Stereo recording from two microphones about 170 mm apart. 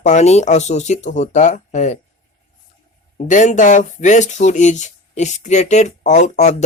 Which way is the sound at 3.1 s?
45° left (ahead or behind).